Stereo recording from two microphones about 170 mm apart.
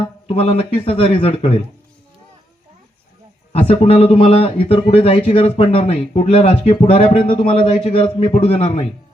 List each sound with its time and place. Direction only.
0.0 s speech: 35° left (ahead or behind)
3.5 s speech: 35° left (ahead or behind)